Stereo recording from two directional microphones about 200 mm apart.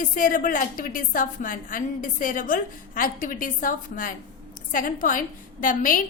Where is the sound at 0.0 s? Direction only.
40° left (ahead or behind).